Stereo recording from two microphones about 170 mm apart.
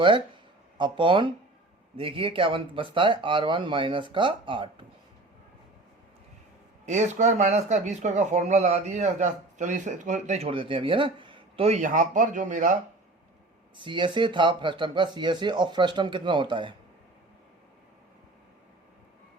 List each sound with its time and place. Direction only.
0.8 s speech: 30° right (ahead or behind)
6.8 s speech: 40° right (ahead or behind)
13.7 s speech: 30° right (ahead or behind)